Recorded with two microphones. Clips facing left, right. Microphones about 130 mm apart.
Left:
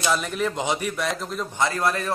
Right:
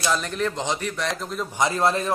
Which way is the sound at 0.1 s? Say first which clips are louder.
Even; 5° left (ahead or behind).